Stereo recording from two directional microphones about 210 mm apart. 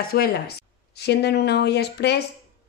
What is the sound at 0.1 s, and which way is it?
A woman's voice, 45° left (ahead or behind).